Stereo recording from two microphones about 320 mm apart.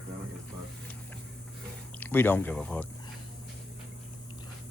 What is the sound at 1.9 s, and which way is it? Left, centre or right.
Speech, centre.